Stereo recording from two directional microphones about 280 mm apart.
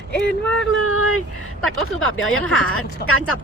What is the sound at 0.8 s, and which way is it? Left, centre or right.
Speech, left.